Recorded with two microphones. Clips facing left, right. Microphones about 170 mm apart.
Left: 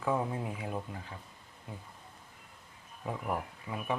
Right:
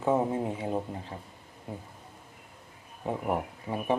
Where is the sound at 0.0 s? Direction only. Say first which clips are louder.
Right 6 dB; 25° right (ahead or behind).